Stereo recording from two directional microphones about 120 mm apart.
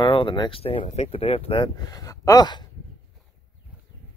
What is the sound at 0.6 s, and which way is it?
Speech, 55° left (ahead or behind).